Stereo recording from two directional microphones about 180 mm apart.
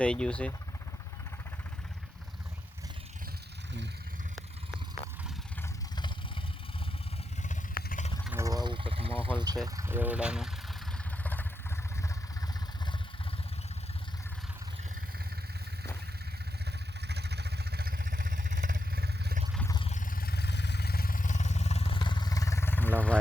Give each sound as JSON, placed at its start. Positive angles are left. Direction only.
{"t": 0.0, "sound": "speech", "side_deg": 5}
{"t": 7.4, "sound": "vehicle", "side_deg": 50}
{"t": 8.2, "sound": "a sound", "side_deg": -10}
{"t": 9.6, "sound": "speech", "side_deg": -15}
{"t": 11.2, "sound": "vehicle", "side_deg": 10}
{"t": 17.1, "sound": "vehicle", "side_deg": -65}
{"t": 19.6, "sound": "a sound", "side_deg": 25}
{"t": 19.9, "sound": "vehicle", "side_deg": 50}